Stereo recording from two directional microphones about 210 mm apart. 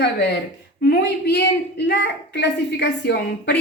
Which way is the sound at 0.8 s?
50° left (ahead or behind).